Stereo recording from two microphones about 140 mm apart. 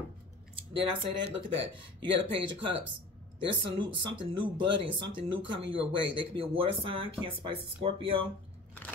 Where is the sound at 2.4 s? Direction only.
35° right (ahead or behind).